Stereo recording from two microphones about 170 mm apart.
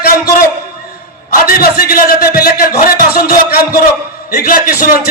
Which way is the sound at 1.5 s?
60° left (ahead or behind).